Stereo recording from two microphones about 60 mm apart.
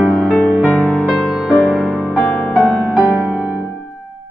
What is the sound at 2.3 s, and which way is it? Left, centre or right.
Music, centre.